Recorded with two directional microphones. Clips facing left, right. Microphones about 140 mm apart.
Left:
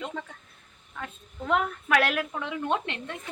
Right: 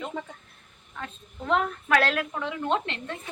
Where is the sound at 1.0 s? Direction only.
5° left (ahead or behind).